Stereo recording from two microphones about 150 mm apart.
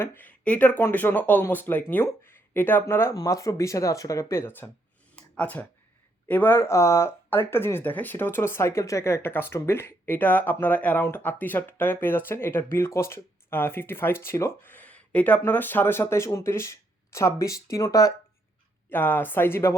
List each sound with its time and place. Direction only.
0.0 s speech: 15° left (ahead or behind)
5.1 s a sound: 10° left (ahead or behind)
6.2 s speech: 10° left (ahead or behind)
18.9 s speech: 15° left (ahead or behind)